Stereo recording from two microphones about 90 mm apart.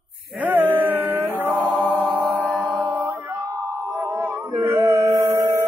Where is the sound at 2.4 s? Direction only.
20° right (ahead or behind).